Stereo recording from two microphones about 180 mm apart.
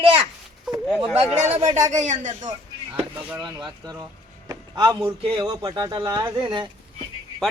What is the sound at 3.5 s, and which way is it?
Speech, 20° right (ahead or behind).